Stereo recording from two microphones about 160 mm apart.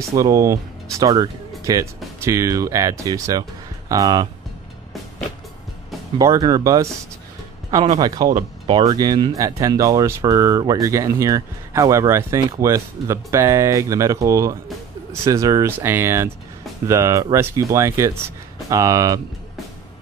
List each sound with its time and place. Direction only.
0.1 s speech: 20° right (ahead or behind)
6.1 s speech: 25° right (ahead or behind)
8.4 s speech: 30° right (ahead or behind)